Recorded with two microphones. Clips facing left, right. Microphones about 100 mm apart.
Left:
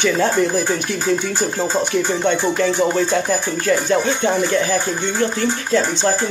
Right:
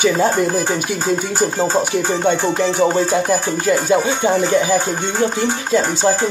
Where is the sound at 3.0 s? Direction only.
5° right (ahead or behind).